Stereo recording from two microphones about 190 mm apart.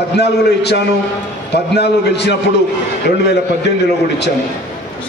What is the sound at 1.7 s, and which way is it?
Speech, 60° left (ahead or behind).